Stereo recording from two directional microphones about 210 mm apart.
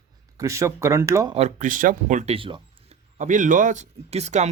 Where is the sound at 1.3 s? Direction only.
35° right (ahead or behind).